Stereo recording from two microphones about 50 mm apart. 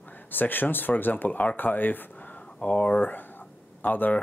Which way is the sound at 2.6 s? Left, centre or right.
Left.